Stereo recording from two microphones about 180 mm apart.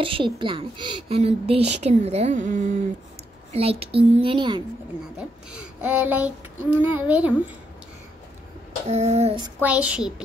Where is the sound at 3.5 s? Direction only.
35° right (ahead or behind).